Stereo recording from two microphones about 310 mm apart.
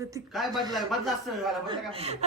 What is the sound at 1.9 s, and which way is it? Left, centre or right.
Speech, centre.